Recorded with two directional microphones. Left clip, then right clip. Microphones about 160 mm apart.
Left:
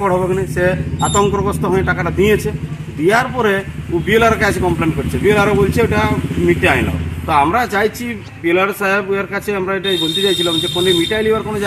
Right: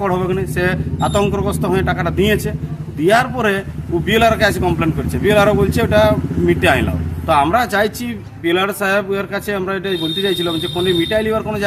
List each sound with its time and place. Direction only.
0.0 s a man's voice: 25° right (ahead or behind)